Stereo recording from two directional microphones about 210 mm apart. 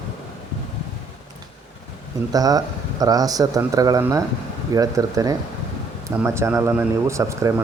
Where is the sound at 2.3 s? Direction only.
20° right (ahead or behind).